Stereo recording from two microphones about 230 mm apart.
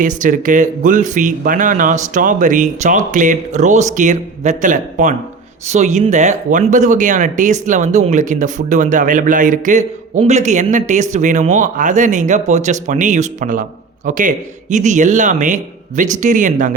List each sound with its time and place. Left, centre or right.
0.0 s speech: right